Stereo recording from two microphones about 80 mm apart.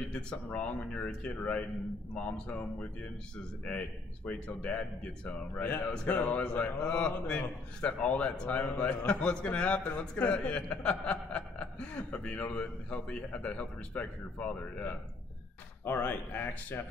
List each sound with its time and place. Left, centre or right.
0.1 s speech: centre